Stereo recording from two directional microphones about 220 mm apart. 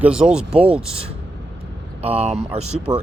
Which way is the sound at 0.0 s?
5° right (ahead or behind).